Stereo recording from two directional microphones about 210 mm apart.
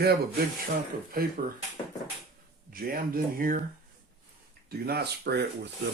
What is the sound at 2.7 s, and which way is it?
Speech, 45° right (ahead or behind).